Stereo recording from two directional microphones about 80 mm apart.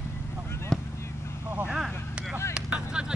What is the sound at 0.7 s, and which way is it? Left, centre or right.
Vehicle, centre.